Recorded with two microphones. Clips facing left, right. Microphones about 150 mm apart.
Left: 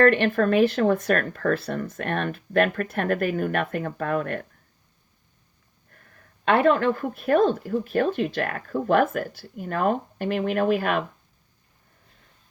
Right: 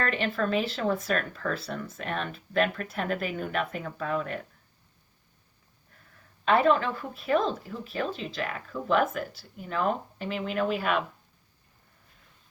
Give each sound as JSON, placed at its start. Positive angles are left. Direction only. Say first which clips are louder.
{"t": 0.0, "sound": "speech", "louder": "left 10 dB", "side_deg": 60}
{"t": 5.9, "sound": "a woman's voice", "louder": "left 3 dB", "side_deg": 55}